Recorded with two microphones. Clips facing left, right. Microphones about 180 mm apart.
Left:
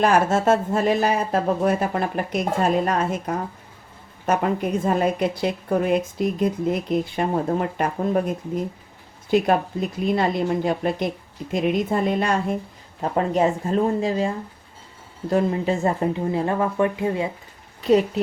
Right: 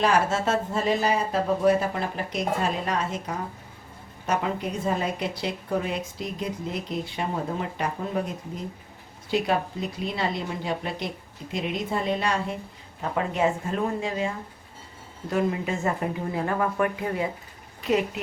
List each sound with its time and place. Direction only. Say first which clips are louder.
0.0 s a woman's voice: left 5 dB; 50° left (ahead or behind)
13.0 s speech: left 5 dB; 35° left (ahead or behind)